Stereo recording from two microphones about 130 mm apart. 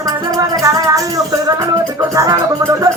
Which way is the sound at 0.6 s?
25° right (ahead or behind).